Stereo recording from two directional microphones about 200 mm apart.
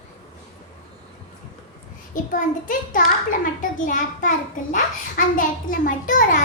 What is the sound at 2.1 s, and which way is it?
A child's voice, 40° left (ahead or behind).